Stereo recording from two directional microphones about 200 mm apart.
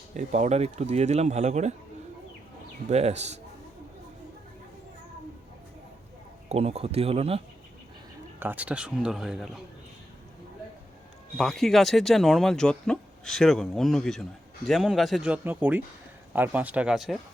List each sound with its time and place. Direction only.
0.1 s speech: 40° right (ahead or behind)
2.9 s speech: 35° right (ahead or behind)
6.5 s speech: 30° right (ahead or behind)
8.4 s speech: 10° right (ahead or behind)
11.3 s speech: centre (ahead or behind)